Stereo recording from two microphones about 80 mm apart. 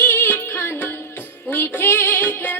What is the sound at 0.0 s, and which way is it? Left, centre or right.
Music, left.